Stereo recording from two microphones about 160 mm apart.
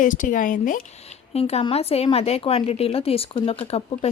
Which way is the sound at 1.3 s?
40° left (ahead or behind).